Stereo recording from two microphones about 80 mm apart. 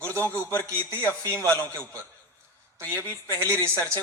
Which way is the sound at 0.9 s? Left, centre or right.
Right.